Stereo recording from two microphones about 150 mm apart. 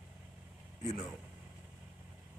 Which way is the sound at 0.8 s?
55° left (ahead or behind).